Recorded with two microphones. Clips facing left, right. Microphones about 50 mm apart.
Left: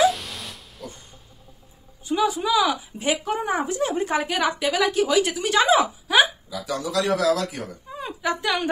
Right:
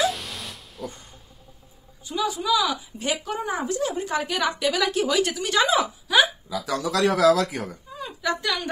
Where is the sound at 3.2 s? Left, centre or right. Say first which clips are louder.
Left 3 dB; left.